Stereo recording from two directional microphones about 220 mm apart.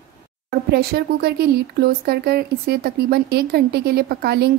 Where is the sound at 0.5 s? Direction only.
45° right (ahead or behind).